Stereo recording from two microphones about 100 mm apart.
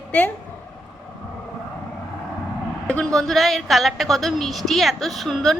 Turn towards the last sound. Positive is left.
turn(degrees=0)  # may be behind; listen again after turning